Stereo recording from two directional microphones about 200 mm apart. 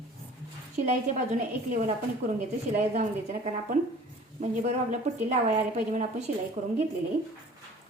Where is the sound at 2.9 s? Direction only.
35° right (ahead or behind).